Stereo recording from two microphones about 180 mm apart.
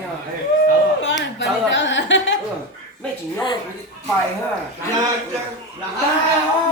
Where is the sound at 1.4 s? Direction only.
90° left.